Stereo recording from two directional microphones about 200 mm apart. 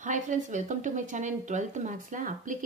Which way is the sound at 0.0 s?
40° right (ahead or behind).